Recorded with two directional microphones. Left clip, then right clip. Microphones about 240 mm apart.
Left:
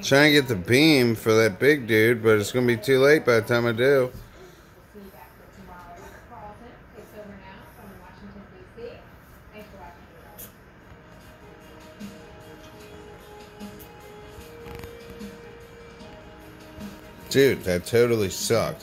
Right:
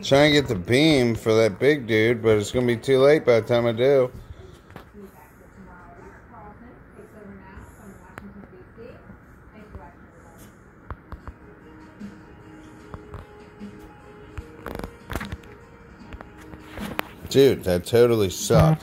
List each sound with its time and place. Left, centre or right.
0.0 s speech: centre
17.3 s speech: centre